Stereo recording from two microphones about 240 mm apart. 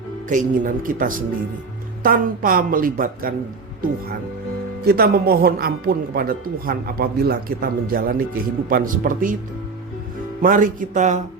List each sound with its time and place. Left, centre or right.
0.3 s a man's voice: right
4.9 s a man's voice: right
10.4 s a man's voice: right